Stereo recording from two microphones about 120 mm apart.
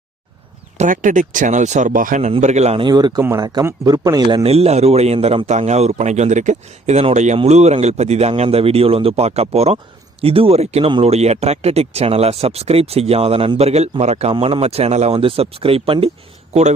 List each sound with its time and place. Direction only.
0.8 s speech: 90° right
2.4 s speech: 70° right (ahead or behind)
2.7 s a man's voice: 35° right (ahead or behind)
3.2 s a man's voice: 20° right (ahead or behind)
4.4 s speech: 60° right (ahead or behind)